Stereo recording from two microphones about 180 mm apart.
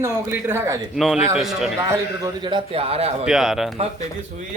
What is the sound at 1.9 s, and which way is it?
A man's voice, 20° right (ahead or behind).